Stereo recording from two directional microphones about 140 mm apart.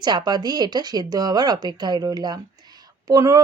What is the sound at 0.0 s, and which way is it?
Speech, 30° right (ahead or behind).